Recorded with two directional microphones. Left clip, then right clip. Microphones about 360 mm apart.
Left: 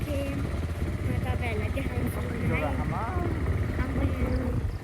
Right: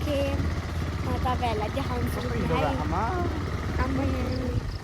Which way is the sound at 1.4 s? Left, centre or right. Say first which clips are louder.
Right 5 dB; centre.